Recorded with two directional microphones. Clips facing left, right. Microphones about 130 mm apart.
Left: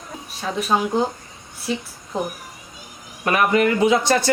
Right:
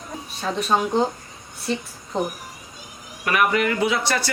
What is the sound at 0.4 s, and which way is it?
Speech, 5° left (ahead or behind).